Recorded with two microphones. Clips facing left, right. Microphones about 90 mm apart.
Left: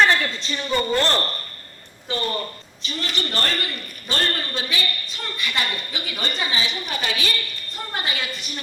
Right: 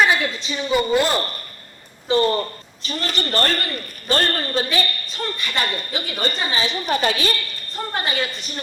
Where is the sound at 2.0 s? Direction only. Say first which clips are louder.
Right 8 dB; 30° right (ahead or behind).